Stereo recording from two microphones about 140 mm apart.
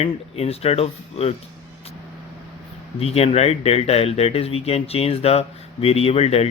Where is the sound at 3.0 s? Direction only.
50° left (ahead or behind).